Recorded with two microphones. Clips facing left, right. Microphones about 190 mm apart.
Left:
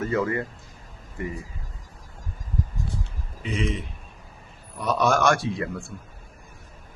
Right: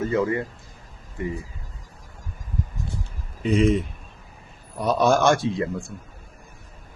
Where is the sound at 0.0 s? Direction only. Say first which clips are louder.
Right 2 dB; 20° right (ahead or behind).